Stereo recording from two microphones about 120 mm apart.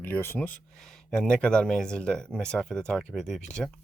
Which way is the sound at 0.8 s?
5° left (ahead or behind).